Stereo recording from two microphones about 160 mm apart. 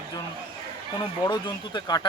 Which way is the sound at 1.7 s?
25° left (ahead or behind).